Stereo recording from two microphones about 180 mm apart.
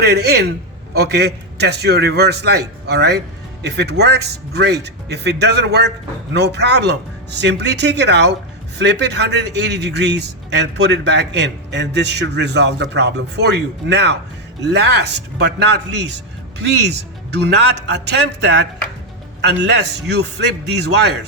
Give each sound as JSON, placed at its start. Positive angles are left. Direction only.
{"t": 0.0, "sound": "a man's voice", "side_deg": -65}